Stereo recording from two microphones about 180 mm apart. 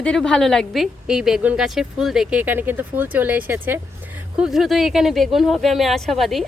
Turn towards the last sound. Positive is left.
turn(degrees=0)  # may be behind; listen again after turning